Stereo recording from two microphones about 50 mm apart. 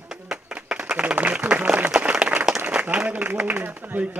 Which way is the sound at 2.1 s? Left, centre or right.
Centre.